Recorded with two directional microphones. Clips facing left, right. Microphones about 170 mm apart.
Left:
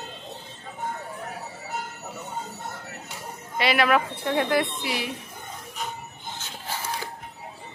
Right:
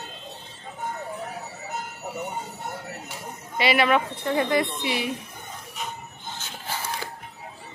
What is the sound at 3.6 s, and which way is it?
A woman's voice, centre (ahead or behind).